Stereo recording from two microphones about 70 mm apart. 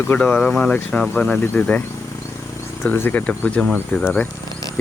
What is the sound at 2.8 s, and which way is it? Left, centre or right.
Speech, left.